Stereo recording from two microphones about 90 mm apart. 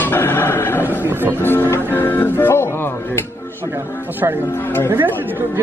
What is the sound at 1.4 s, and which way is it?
Speech, 25° left (ahead or behind).